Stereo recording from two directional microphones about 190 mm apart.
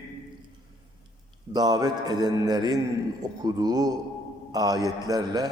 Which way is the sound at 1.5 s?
20° right (ahead or behind).